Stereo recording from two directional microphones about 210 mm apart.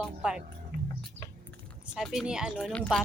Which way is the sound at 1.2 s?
30° right (ahead or behind).